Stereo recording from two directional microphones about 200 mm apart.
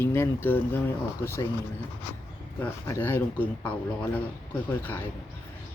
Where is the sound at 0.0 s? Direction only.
10° left (ahead or behind).